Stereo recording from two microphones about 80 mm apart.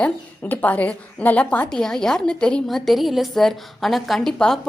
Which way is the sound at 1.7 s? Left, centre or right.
Centre.